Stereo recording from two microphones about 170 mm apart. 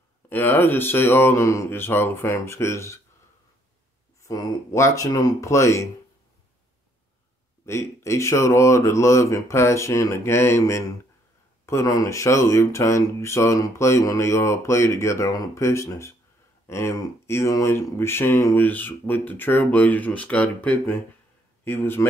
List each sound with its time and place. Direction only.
0.3 s speech: 10° left (ahead or behind)
4.2 s speech: 20° left (ahead or behind)
7.6 s speech: 15° left (ahead or behind)